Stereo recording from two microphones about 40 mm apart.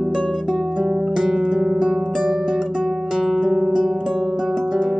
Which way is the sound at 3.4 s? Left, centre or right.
Centre.